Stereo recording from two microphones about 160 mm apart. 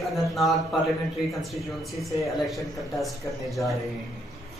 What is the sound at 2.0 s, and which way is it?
A man's voice, centre (ahead or behind).